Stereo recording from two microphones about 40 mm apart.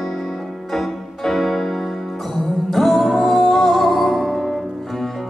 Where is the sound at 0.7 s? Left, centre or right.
Centre.